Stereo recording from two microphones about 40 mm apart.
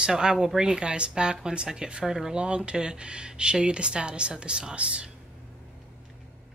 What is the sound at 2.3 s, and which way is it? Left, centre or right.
Speech, right.